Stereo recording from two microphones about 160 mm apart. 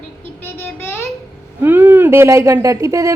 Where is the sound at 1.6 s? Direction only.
10° right (ahead or behind).